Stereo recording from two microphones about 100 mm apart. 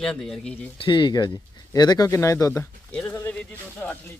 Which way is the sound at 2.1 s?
30° left (ahead or behind).